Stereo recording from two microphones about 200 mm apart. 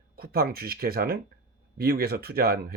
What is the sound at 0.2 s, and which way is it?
Speech, 50° right (ahead or behind).